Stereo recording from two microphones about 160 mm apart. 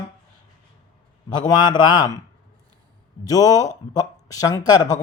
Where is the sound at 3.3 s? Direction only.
20° left (ahead or behind).